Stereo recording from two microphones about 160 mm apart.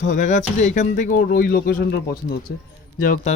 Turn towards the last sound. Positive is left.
turn(degrees=55)  # may be behind; listen again after turning